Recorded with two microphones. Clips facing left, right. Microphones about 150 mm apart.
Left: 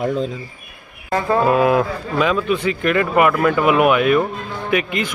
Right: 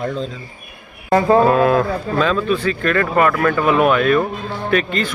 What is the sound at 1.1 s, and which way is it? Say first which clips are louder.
Music: right 5 dB; 30° right (ahead or behind).